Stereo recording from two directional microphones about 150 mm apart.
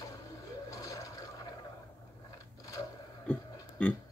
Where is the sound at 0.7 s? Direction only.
20° left (ahead or behind).